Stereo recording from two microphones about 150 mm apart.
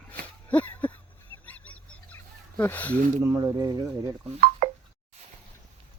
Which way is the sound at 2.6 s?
10° left (ahead or behind).